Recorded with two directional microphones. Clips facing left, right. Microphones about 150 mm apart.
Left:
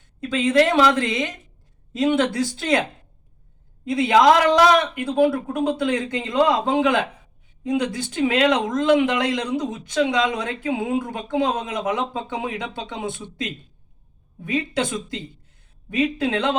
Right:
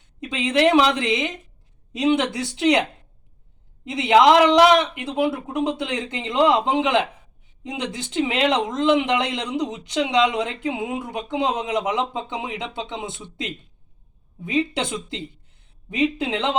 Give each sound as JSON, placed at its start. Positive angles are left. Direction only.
{"t": 0.2, "sound": "speech", "side_deg": -20}
{"t": 3.8, "sound": "speech", "side_deg": -20}